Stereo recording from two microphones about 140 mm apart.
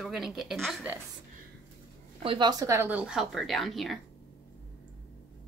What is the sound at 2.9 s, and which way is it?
A woman's voice, 10° right (ahead or behind).